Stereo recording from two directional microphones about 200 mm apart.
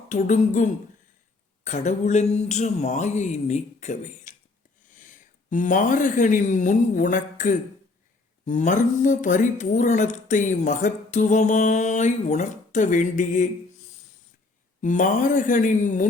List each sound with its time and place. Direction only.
0.1 s speech: 40° left (ahead or behind)
14.8 s speech: 40° left (ahead or behind)